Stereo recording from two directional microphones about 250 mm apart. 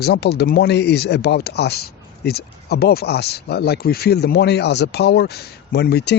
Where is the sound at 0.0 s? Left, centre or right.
Left.